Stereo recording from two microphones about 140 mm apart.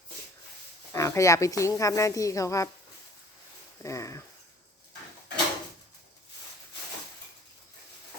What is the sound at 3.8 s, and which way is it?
Speech, 20° left (ahead or behind).